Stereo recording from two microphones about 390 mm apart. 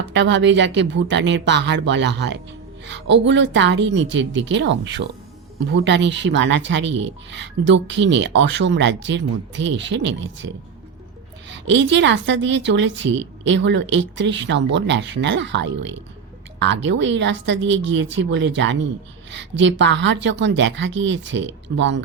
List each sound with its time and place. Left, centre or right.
0.1 s speech: right
11.4 s speech: right
15.7 s speech: right
16.6 s speech: right